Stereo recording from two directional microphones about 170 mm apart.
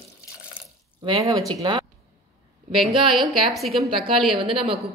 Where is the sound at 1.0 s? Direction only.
25° right (ahead or behind).